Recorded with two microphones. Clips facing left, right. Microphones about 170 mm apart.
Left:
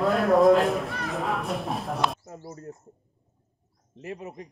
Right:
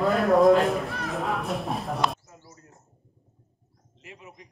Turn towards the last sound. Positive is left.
turn(degrees=40)  # may be behind; listen again after turning